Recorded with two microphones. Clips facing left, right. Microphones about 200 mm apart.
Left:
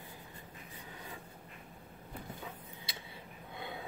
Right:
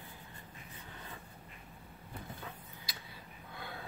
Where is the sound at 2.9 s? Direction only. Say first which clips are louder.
Left 2 dB; 25° left (ahead or behind).